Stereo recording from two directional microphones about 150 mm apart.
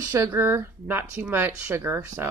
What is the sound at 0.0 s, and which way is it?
Speech, 20° right (ahead or behind).